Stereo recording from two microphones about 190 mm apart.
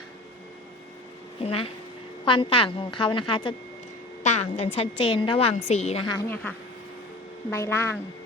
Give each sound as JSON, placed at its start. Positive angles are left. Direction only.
{"t": 1.4, "sound": "a woman's voice", "side_deg": 30}
{"t": 6.1, "sound": "a woman's voice", "side_deg": 15}
{"t": 7.5, "sound": "a woman's voice", "side_deg": 10}